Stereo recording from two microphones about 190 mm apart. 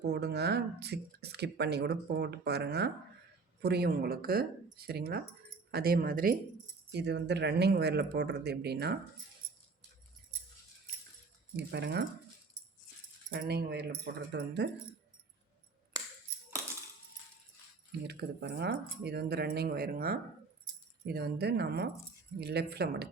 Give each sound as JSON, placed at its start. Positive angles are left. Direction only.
{"t": 0.0, "sound": "speech", "side_deg": -60}
{"t": 6.9, "sound": "speech", "side_deg": -65}
{"t": 11.5, "sound": "speech", "side_deg": -65}
{"t": 13.3, "sound": "speech", "side_deg": -55}
{"t": 18.1, "sound": "speech", "side_deg": -60}